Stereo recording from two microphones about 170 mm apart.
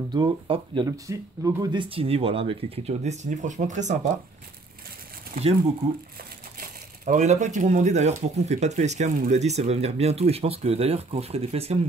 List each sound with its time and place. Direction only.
0.1 s speech: 25° right (ahead or behind); by 4.0 s 45° right (ahead or behind)
6.6 s speech: 45° right (ahead or behind)